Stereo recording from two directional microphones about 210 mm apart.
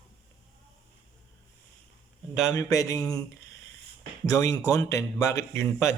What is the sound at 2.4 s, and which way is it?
Speech, 15° left (ahead or behind).